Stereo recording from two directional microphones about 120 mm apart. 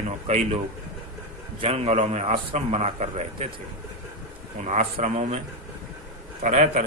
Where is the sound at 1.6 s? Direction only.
60° right (ahead or behind).